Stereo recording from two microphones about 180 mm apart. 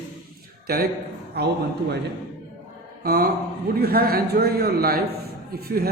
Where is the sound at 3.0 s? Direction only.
55° right (ahead or behind).